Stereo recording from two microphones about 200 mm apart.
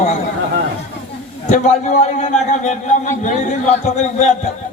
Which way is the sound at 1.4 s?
35° left (ahead or behind).